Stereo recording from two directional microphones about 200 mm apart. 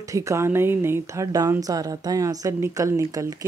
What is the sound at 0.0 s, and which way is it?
Speech, 15° right (ahead or behind).